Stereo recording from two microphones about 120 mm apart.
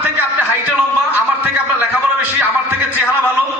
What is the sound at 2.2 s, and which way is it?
Music, 15° right (ahead or behind).